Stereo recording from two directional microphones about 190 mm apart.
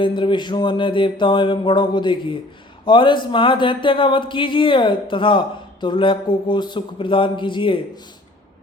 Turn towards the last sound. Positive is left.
turn(degrees=25)  # may be behind; listen again after turning